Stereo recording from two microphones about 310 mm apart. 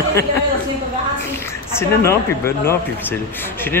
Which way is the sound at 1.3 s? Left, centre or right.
Centre.